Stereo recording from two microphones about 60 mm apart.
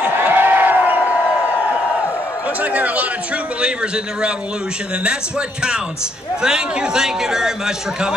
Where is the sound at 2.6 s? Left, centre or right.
Right.